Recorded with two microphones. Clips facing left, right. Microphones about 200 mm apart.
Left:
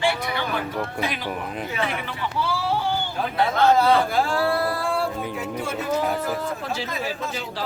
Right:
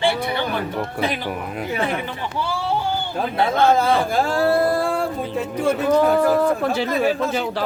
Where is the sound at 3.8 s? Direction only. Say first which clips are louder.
Even; 45° right (ahead or behind).